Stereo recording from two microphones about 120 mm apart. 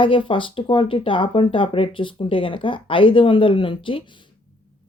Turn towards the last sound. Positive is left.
turn(degrees=45)  # may be behind; listen again after turning